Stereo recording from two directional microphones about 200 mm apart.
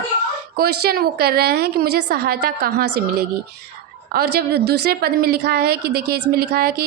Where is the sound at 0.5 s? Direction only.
50° right (ahead or behind).